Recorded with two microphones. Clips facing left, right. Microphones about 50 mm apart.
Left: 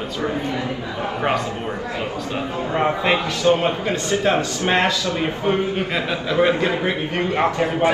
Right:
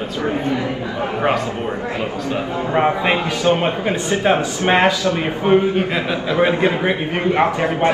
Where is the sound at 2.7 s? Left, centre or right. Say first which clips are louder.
Right 2 dB; centre.